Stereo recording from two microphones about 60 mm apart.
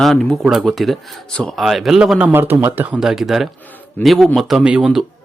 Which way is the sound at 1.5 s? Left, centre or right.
Centre.